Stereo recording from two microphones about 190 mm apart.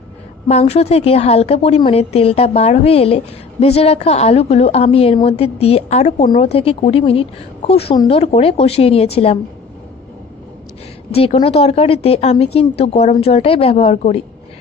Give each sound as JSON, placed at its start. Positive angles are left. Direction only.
{"t": 0.5, "sound": "a woman's voice", "side_deg": 35}
{"t": 11.1, "sound": "a woman's voice", "side_deg": 30}